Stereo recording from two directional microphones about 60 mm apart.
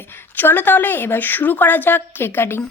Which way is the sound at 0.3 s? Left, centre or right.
Left.